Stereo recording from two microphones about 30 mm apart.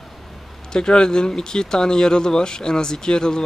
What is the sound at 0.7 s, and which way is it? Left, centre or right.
Speech, left.